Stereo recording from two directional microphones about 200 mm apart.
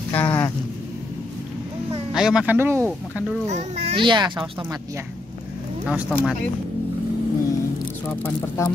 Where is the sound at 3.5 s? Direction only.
35° right (ahead or behind); by 5.0 s 15° right (ahead or behind).